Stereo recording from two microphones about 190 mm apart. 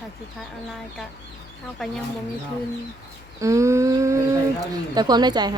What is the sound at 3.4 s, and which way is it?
Speech, 15° right (ahead or behind).